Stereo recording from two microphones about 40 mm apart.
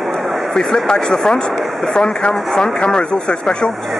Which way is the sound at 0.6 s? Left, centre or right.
Centre.